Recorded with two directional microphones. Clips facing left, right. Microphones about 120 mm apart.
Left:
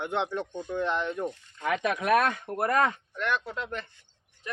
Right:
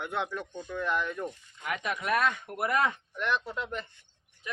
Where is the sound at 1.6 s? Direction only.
90° left; by 2.3 s 65° left (ahead or behind).